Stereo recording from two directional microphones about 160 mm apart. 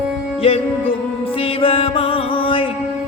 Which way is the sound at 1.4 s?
35° left (ahead or behind).